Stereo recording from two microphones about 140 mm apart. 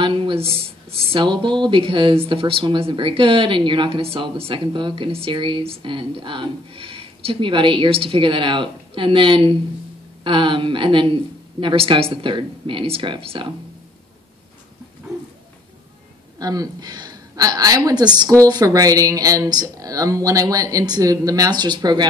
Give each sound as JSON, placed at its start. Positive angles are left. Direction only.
{"t": 0.0, "sound": "speech", "side_deg": -35}
{"t": 16.3, "sound": "a woman's voice", "side_deg": -25}